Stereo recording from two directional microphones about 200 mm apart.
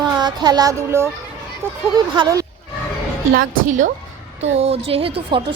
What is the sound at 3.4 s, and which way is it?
A woman's voice, 40° right (ahead or behind).